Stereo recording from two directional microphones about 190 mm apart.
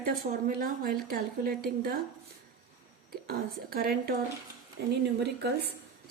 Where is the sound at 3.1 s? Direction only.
50° right (ahead or behind).